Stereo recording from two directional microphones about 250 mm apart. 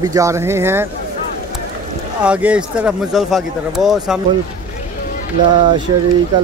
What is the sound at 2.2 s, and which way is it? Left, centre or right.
Speech, centre.